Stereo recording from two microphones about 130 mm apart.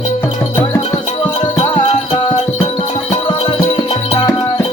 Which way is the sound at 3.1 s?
55° left (ahead or behind).